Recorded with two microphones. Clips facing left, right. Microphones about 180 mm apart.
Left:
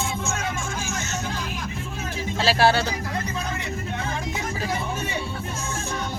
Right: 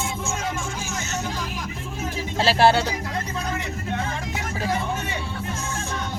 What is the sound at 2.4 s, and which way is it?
Speech, 20° right (ahead or behind).